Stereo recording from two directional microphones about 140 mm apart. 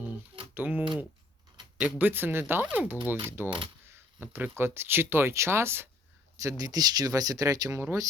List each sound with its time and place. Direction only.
0.5 s speech: 15° right (ahead or behind)